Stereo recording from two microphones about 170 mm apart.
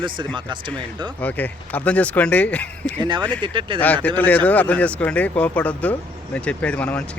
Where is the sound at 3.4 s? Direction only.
30° right (ahead or behind).